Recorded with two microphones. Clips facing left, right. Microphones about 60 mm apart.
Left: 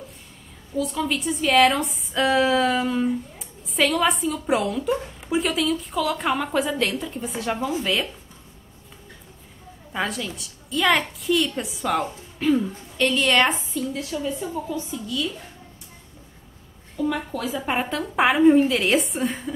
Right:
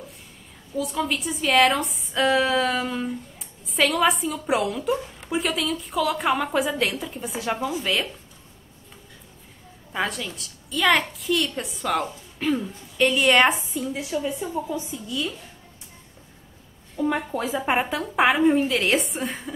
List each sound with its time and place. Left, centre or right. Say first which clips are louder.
0.7 s a woman's voice: left 1 dB; centre
9.9 s a woman's voice: even; centre; by 15.3 s right
16.9 s speech: right 1 dB; right
17.9 s a woman's voice: left 3 dB; centre